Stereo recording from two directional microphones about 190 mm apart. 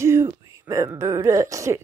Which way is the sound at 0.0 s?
15° right (ahead or behind).